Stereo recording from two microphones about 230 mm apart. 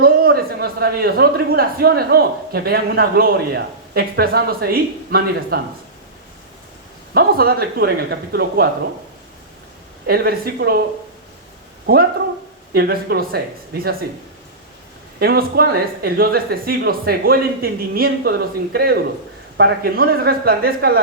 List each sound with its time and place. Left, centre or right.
0.0 s a man's voice: right
7.1 s speech: right
10.1 s speech: right
11.9 s speech: right
15.2 s speech: right